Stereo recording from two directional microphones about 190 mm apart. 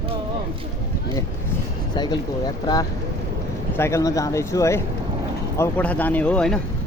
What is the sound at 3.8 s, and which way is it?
Speech, 15° left (ahead or behind).